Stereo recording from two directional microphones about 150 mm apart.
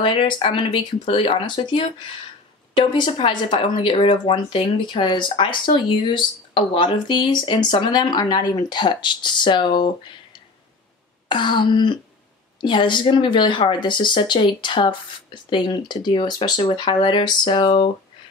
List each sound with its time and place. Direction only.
0.0 s speech: 35° left (ahead or behind)
2.8 s speech: 30° left (ahead or behind)
11.2 s speech: 30° left (ahead or behind)